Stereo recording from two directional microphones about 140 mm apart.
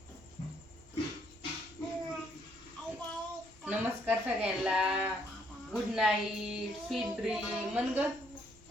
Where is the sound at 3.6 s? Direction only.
10° right (ahead or behind).